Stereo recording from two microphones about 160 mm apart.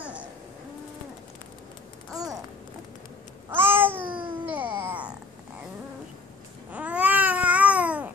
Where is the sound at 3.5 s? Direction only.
15° right (ahead or behind).